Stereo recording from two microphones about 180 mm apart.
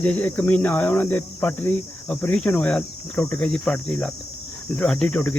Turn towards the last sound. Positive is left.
turn(degrees=10)  # may be behind; listen again after turning